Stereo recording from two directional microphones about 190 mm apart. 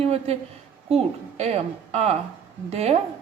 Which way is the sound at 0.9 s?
35° right (ahead or behind).